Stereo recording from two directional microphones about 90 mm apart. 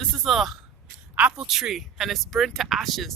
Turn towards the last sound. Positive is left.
turn(degrees=0)  # may be behind; listen again after turning